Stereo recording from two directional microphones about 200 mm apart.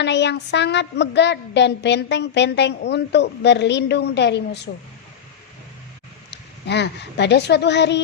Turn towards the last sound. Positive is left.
turn(degrees=60)  # may be behind; listen again after turning